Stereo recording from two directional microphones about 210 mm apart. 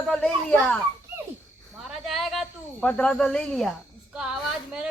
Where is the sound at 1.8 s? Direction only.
Centre (ahead or behind).